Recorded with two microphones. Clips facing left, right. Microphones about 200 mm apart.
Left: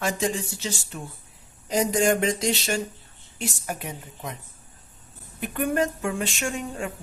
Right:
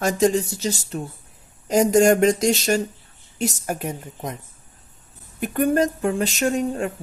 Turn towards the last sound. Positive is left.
turn(degrees=-40)  # may be behind; listen again after turning